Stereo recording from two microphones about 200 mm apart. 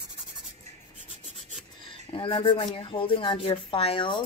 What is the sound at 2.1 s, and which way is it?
A woman's voice, 25° left (ahead or behind).